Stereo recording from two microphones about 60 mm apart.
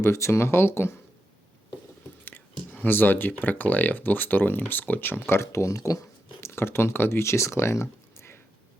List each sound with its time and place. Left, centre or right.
0.0 s speech: left
2.8 s speech: left
6.5 s speech: left